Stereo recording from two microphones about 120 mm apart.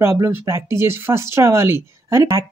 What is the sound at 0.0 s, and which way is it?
Speech, 20° right (ahead or behind).